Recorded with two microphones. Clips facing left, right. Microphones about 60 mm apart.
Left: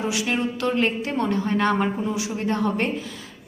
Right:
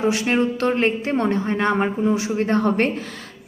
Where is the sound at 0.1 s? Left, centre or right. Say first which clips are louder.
Right 5 dB; right.